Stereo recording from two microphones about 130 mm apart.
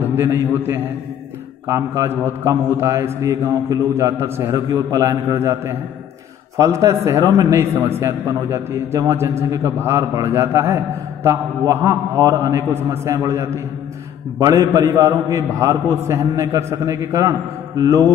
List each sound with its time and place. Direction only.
0.0 s a man's voice: 20° right (ahead or behind)